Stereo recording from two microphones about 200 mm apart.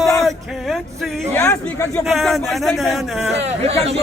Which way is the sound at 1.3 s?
10° left (ahead or behind).